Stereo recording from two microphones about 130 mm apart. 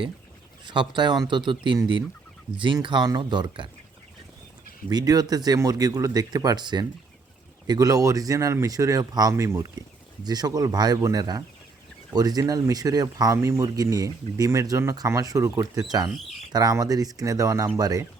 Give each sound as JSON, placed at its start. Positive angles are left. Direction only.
{"t": 0.6, "sound": "speech", "side_deg": -35}
{"t": 4.9, "sound": "speech", "side_deg": -30}